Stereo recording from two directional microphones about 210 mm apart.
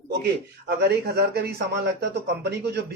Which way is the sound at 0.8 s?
50° right (ahead or behind).